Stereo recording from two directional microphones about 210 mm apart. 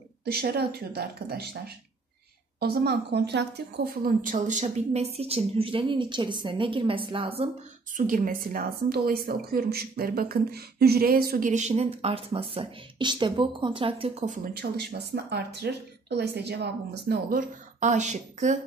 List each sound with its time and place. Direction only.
0.2 s a woman's voice: 50° right (ahead or behind)
2.6 s a woman's voice: 50° right (ahead or behind); by 7.4 s 25° right (ahead or behind)
8.0 s a woman's voice: 40° right (ahead or behind)